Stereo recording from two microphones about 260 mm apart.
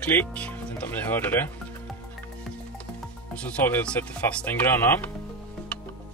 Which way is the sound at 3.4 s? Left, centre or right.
Centre.